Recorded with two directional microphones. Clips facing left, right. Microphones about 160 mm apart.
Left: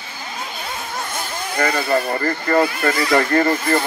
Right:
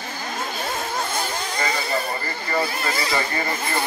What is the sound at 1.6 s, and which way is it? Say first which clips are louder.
Speech: left 7 dB; 60° left (ahead or behind).